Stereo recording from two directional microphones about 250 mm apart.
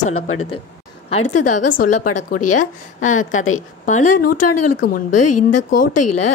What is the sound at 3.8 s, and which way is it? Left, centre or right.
Speech, left.